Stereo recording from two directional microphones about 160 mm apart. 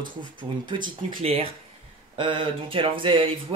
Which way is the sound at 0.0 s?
30° right (ahead or behind).